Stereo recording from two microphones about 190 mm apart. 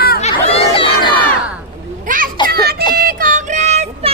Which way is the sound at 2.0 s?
45° right (ahead or behind).